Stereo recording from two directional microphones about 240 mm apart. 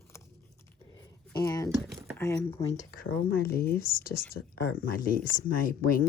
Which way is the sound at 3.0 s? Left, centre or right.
Left.